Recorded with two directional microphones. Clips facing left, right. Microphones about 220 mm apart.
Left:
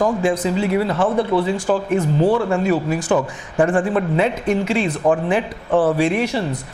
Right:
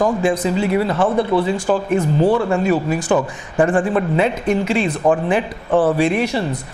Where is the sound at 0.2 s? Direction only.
15° right (ahead or behind).